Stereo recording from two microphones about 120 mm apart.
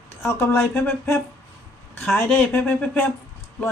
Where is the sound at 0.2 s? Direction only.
20° left (ahead or behind).